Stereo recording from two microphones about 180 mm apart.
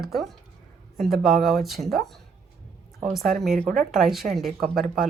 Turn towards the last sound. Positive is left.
turn(degrees=0)  # may be behind; listen again after turning